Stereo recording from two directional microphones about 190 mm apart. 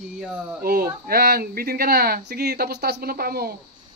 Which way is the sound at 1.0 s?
55° right (ahead or behind).